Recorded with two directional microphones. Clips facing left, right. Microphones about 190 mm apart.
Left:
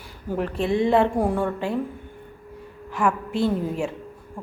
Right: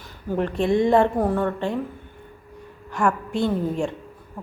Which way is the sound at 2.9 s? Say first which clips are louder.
Right 1 dB; 5° left (ahead or behind).